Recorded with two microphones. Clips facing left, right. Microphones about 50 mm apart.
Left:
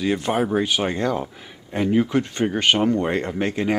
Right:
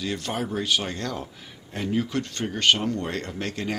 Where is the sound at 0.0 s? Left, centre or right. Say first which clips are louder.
Left 8 dB; left.